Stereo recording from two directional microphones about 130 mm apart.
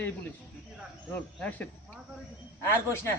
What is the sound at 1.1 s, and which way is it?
Speech, 15° left (ahead or behind).